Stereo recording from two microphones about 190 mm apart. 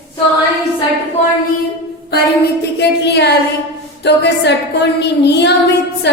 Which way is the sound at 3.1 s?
60° left (ahead or behind).